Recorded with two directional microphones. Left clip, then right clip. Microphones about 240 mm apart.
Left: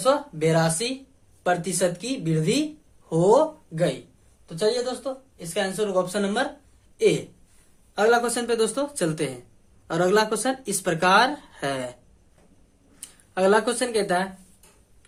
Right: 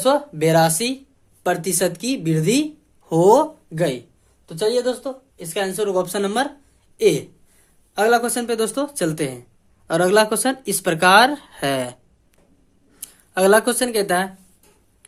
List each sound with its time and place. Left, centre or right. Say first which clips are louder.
0.0 s speech: right 4 dB; right
13.0 s speech: right 5 dB; right